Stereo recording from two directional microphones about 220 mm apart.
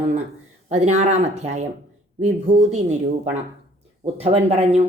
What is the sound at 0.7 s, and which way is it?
Speech, 30° right (ahead or behind).